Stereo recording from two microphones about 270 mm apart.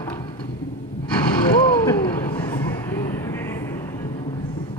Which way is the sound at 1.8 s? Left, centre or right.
Centre.